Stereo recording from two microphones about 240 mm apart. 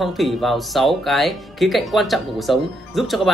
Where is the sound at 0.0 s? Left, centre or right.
Centre.